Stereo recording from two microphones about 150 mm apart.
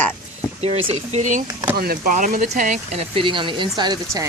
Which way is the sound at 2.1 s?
60° right (ahead or behind).